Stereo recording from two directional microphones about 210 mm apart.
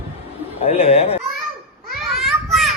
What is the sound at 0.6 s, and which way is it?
Speech, 30° left (ahead or behind).